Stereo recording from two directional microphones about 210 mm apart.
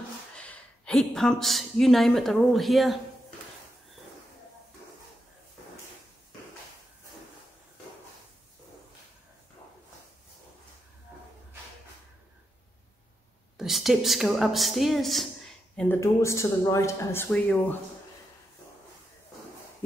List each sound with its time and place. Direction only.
0.4 s speech: 5° left (ahead or behind)
13.6 s a woman's voice: centre (ahead or behind)